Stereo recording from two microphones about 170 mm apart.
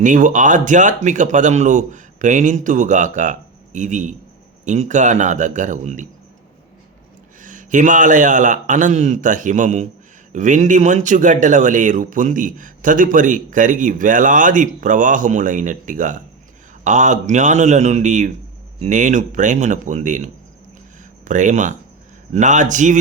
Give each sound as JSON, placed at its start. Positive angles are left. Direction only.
{"t": 0.0, "sound": "speech", "side_deg": -50}
{"t": 7.4, "sound": "speech", "side_deg": -50}